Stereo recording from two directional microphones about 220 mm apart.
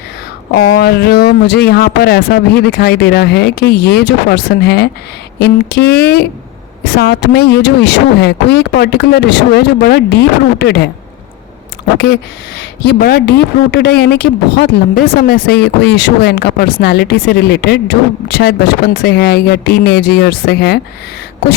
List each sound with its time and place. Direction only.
0.5 s speech: 50° left (ahead or behind)
12.5 s speech: 50° left (ahead or behind)